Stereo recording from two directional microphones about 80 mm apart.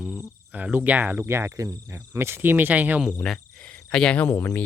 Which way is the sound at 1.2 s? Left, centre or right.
Right.